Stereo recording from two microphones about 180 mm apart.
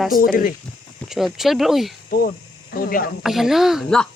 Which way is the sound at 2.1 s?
55° left (ahead or behind).